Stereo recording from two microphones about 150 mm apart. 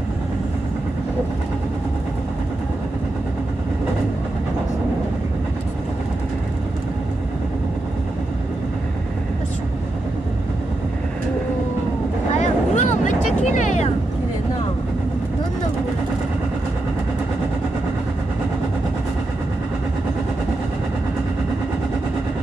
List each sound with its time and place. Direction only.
12.4 s vehicle: 55° left (ahead or behind)